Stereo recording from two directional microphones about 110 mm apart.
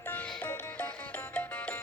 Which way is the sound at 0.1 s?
15° left (ahead or behind).